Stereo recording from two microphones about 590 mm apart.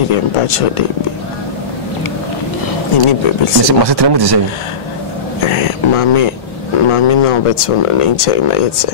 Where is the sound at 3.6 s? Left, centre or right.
Right.